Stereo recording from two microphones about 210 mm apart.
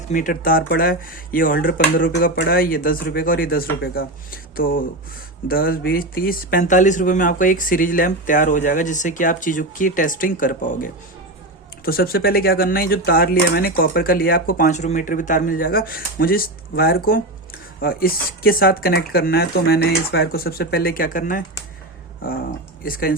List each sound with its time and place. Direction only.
0.1 s speech: 40° left (ahead or behind)
1.5 s speech: 60° left (ahead or behind)
2.2 s speech: 50° left (ahead or behind)
22.8 s speech: 45° left (ahead or behind)